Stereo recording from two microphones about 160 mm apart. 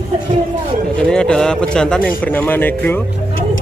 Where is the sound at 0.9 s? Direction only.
5° left (ahead or behind).